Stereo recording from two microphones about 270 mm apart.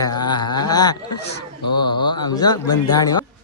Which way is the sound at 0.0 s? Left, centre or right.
Centre.